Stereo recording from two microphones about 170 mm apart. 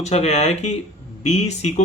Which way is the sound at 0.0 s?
40° left (ahead or behind).